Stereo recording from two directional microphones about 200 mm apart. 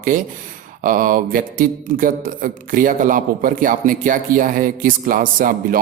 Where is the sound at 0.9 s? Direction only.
45° right (ahead or behind).